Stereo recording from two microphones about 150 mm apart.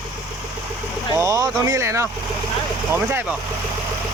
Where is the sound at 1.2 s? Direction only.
20° right (ahead or behind).